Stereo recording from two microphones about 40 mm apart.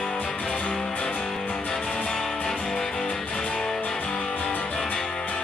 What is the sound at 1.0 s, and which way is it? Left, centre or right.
Music, left.